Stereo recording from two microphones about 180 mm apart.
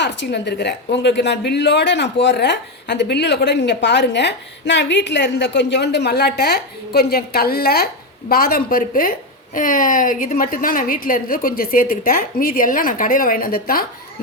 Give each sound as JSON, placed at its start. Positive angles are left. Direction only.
{"t": 0.0, "sound": "a woman's voice", "side_deg": 75}